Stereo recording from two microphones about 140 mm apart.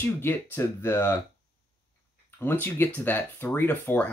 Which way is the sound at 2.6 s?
15° left (ahead or behind).